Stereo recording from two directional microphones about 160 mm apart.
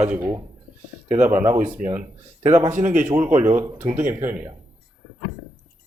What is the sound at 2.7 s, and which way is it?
Speech, 50° right (ahead or behind).